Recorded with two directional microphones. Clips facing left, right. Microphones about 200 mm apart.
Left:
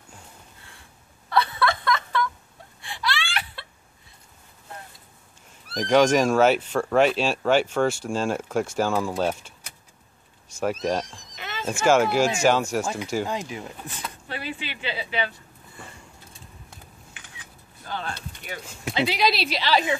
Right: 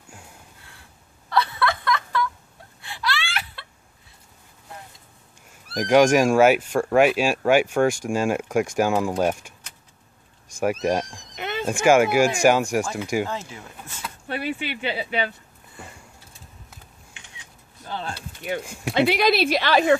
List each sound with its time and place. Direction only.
1.3 s a sound: centre (ahead or behind)
5.8 s speech: 10° right (ahead or behind)
10.5 s speech: 10° right (ahead or behind)
11.3 s a sound: 55° right (ahead or behind)
11.6 s speech: 10° right (ahead or behind)
13.3 s speech: 15° left (ahead or behind)
14.2 s speech: 55° right (ahead or behind)
17.1 s a sound: 25° right (ahead or behind)
18.9 s a woman's voice: 55° right (ahead or behind)